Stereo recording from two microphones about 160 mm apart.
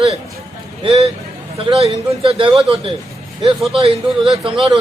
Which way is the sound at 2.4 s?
35° right (ahead or behind).